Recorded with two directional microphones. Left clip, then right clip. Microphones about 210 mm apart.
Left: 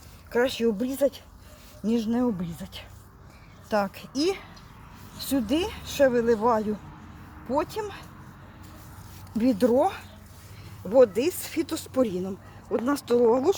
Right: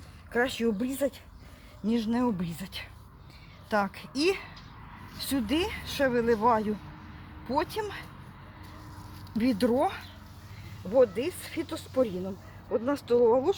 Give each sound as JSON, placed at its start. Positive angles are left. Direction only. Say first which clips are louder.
{"t": 0.3, "sound": "a woman's voice", "louder": "left 4 dB", "side_deg": 40}
{"t": 9.4, "sound": "a woman's voice", "louder": "left 4 dB", "side_deg": 35}